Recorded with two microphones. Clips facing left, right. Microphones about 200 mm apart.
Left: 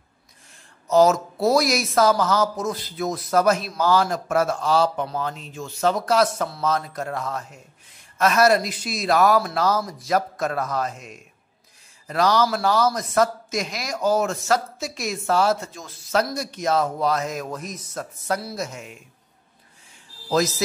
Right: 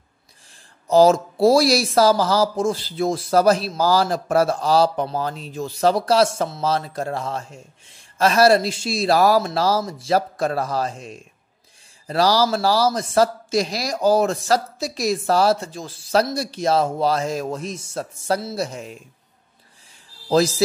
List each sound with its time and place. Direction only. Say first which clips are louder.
0.8 s speech: right 3 dB; 30° right (ahead or behind)
20.2 s speech: right 4 dB; 30° right (ahead or behind)